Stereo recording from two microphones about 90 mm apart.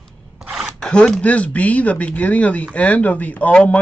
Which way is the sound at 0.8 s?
10° left (ahead or behind).